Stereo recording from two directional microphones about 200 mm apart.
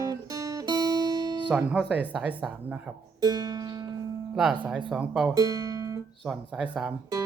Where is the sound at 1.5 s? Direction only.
5° right (ahead or behind).